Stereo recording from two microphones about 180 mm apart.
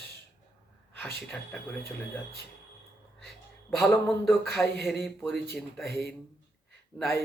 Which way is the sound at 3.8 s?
Centre (ahead or behind).